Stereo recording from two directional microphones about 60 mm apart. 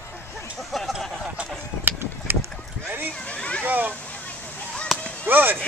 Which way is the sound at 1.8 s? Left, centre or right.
Right.